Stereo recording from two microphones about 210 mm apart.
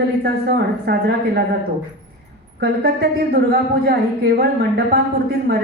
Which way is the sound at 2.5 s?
50° right (ahead or behind).